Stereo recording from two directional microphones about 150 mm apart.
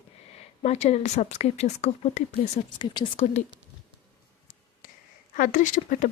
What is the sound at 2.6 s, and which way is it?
Speech, 30° left (ahead or behind).